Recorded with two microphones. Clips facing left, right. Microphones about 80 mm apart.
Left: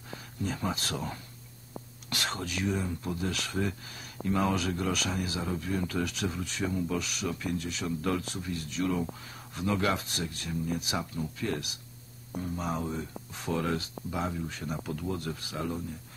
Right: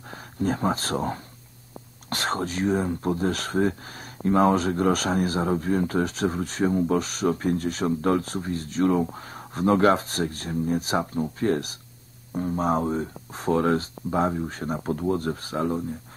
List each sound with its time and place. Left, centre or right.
0.1 s speech: right